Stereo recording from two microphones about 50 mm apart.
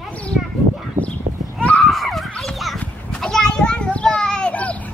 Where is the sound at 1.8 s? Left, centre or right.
Centre.